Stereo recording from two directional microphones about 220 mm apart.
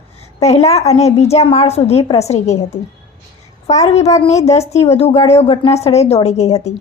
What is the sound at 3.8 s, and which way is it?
A woman's voice, 30° left (ahead or behind).